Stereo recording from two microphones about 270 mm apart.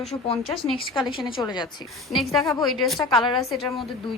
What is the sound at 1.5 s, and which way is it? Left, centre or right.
Speech, centre.